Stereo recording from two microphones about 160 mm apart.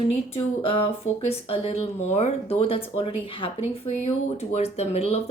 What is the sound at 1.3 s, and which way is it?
Speech, 35° left (ahead or behind).